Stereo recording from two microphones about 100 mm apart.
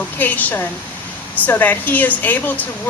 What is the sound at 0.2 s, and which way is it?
A woman's voice, 15° left (ahead or behind).